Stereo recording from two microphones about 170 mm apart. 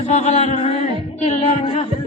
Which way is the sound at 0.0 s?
40° left (ahead or behind).